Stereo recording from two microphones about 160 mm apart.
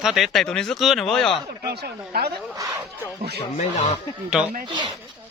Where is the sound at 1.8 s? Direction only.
80° right.